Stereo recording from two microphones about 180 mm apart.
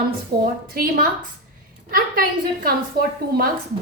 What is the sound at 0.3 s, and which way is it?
Speech, 65° right (ahead or behind).